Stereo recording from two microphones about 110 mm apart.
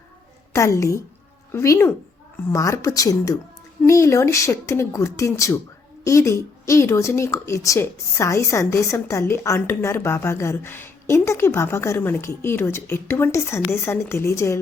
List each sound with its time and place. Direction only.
0.5 s a woman's voice: 30° left (ahead or behind)